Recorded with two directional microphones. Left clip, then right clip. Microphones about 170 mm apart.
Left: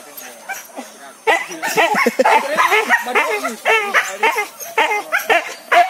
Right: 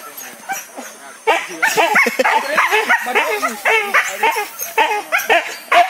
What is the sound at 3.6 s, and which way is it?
Dog, 30° left (ahead or behind).